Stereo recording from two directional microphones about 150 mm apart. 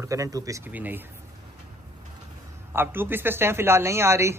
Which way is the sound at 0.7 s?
10° right (ahead or behind).